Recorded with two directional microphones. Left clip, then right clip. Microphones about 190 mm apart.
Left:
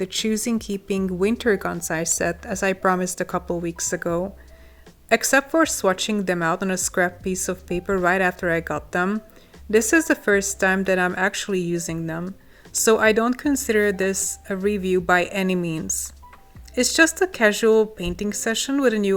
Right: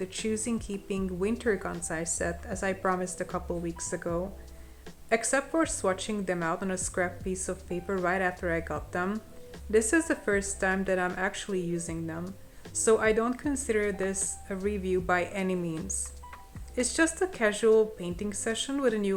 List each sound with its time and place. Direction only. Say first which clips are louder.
0.0 s speech: left 8 dB; 45° left (ahead or behind)